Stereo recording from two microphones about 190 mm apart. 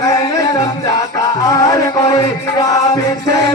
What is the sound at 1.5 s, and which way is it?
Music, 20° left (ahead or behind).